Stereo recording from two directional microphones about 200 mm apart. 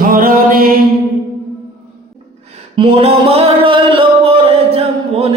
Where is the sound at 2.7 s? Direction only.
30° right (ahead or behind).